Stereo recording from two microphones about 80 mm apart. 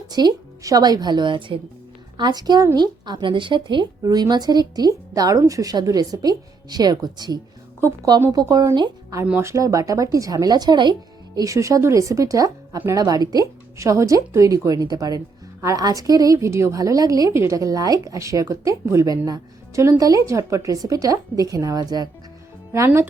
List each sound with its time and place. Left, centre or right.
0.1 s a woman's voice: right
2.1 s a woman's voice: right
4.0 s a woman's voice: right
9.4 s a woman's voice: right
11.3 s a woman's voice: right